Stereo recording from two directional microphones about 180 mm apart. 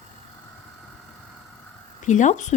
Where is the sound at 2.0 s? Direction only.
45° left (ahead or behind).